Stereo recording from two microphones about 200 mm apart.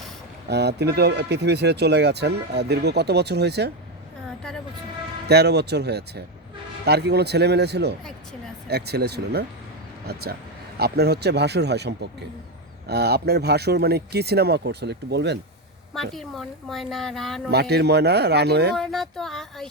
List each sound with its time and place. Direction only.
0.4 s speech: 55° right (ahead or behind)
5.3 s speech: 55° right (ahead or behind)
16.1 s a woman's voice: centre (ahead or behind)
17.5 s speech: 55° right (ahead or behind)
18.7 s a woman's voice: centre (ahead or behind)